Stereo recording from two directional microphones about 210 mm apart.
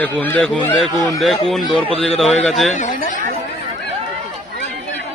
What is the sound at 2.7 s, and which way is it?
Speech, 35° left (ahead or behind).